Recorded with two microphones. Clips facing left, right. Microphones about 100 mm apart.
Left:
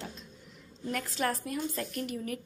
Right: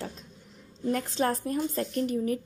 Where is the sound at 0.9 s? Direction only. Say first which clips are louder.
Right 4 dB; 30° right (ahead or behind).